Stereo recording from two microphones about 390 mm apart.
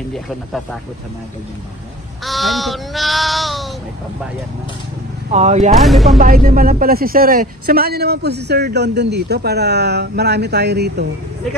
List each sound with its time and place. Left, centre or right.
2.2 s child singing: centre
5.3 s speech: centre
5.8 s speech: centre
6.1 s speech: right